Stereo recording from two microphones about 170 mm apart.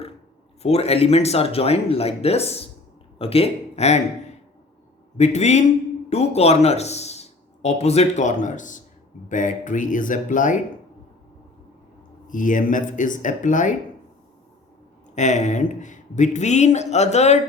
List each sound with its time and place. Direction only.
0.6 s speech: 35° left (ahead or behind)
5.1 s speech: 40° left (ahead or behind)
12.3 s speech: 50° left (ahead or behind)
15.1 s speech: 45° left (ahead or behind)